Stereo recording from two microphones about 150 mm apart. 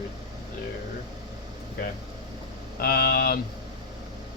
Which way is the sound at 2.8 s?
90° left.